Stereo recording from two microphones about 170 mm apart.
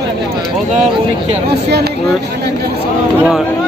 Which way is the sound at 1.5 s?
75° right (ahead or behind).